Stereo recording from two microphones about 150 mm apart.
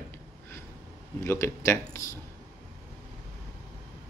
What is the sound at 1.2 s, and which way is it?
Speech, 15° left (ahead or behind).